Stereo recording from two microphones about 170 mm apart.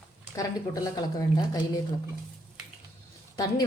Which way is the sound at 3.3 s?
20° left (ahead or behind).